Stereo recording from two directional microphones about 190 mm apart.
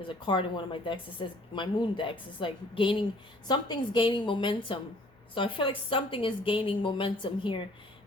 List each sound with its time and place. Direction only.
0.2 s a woman's voice: 25° left (ahead or behind)